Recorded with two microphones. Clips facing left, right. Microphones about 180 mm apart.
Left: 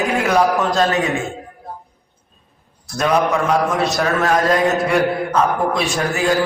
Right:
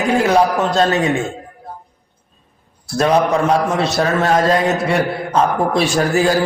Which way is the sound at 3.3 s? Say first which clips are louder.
Right 2 dB; centre (ahead or behind).